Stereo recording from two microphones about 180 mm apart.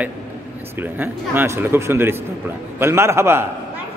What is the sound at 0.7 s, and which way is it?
A man's voice, 10° right (ahead or behind).